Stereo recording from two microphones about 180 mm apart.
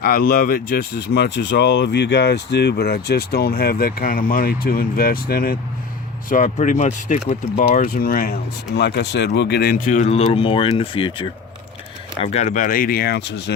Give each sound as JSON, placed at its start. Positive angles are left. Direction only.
{"t": 0.0, "sound": "speech", "side_deg": 55}
{"t": 7.5, "sound": "speech", "side_deg": 50}